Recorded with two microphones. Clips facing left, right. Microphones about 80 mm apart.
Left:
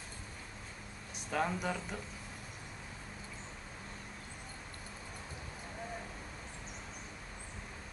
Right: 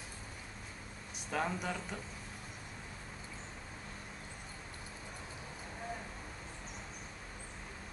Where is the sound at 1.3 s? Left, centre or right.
Centre.